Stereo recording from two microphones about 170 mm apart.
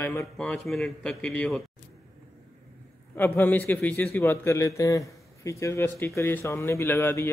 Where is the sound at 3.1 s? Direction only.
10° left (ahead or behind).